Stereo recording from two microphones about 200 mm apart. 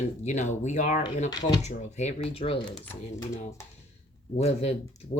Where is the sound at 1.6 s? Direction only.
35° left (ahead or behind).